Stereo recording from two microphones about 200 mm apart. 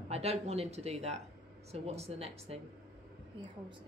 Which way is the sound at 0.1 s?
30° right (ahead or behind).